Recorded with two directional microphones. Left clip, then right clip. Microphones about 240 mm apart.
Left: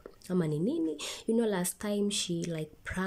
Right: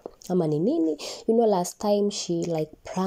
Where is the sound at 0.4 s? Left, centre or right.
Centre.